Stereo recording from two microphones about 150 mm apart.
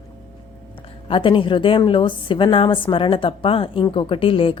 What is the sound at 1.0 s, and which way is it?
A woman's voice, 35° left (ahead or behind).